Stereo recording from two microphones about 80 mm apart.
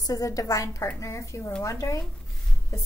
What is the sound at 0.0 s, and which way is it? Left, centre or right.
A woman's voice, left.